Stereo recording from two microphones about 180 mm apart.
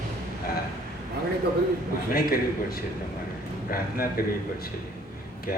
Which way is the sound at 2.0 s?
55° left (ahead or behind).